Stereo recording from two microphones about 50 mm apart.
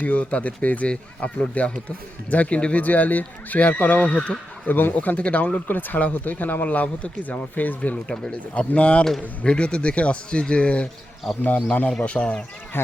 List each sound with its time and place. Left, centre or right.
0.0 s speech: left
2.8 s speech: left
4.7 s speech: left
4.9 s speech: left
8.0 s speech: centre
12.7 s speech: left